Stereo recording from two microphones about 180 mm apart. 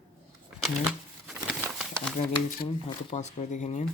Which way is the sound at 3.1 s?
40° left (ahead or behind).